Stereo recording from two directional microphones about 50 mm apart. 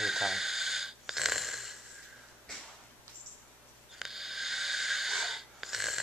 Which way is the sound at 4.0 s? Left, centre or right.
Centre.